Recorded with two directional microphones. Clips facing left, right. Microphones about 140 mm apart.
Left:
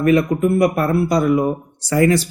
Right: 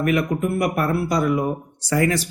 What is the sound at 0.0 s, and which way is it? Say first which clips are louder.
A man's voice: left 6 dB; 30° left (ahead or behind).